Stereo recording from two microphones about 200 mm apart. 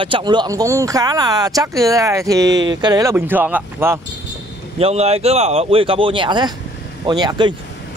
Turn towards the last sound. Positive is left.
turn(degrees=-20)  # may be behind; listen again after turning